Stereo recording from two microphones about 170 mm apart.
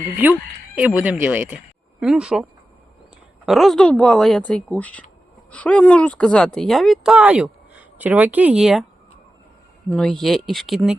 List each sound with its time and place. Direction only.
0.2 s speech: 10° right (ahead or behind)
9.9 s speech: 5° left (ahead or behind)